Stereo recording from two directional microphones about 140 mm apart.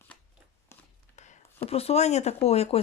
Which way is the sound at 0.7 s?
20° left (ahead or behind).